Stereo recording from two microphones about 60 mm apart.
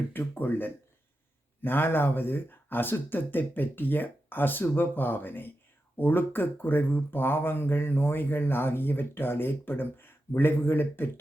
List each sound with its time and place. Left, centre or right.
0.1 s speech: left